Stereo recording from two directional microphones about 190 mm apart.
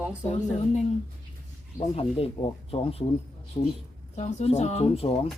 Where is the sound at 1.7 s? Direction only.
30° left (ahead or behind).